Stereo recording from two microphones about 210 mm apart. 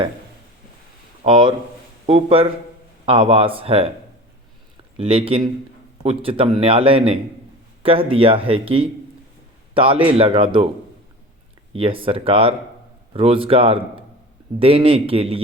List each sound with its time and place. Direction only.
1.2 s a man's voice: 25° right (ahead or behind)
4.9 s a man's voice: 25° right (ahead or behind)
11.7 s a man's voice: 25° right (ahead or behind)